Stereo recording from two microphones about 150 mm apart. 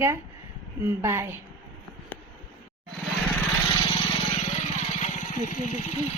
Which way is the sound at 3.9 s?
40° left (ahead or behind).